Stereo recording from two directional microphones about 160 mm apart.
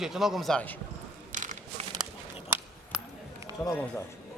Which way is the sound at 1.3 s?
50° right (ahead or behind).